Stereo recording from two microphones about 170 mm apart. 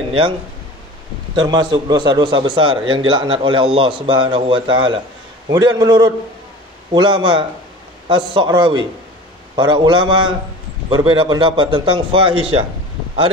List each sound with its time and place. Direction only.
1.3 s a man's voice: 25° right (ahead or behind)